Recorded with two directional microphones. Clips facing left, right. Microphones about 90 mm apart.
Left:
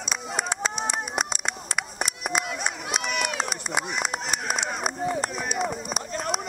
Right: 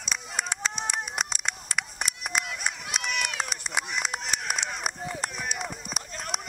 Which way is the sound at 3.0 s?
35° left (ahead or behind).